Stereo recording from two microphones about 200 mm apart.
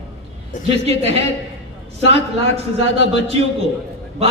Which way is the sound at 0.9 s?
30° right (ahead or behind).